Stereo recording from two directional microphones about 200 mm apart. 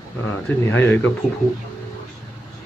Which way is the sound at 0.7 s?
10° left (ahead or behind).